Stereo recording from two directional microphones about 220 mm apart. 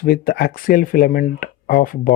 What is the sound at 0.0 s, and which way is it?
Speech, 40° left (ahead or behind).